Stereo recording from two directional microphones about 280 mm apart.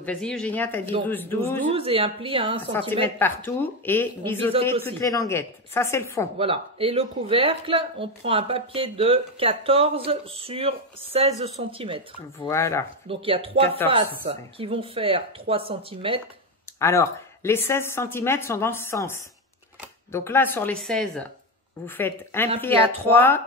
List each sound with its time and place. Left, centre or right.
0.0 s speech: centre
1.7 s speech: centre
3.2 s speech: centre
6.3 s speech: centre
12.4 s speech: centre
13.1 s speech: centre
16.8 s speech: centre